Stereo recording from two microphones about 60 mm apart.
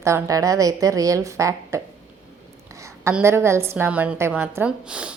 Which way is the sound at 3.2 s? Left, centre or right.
Right.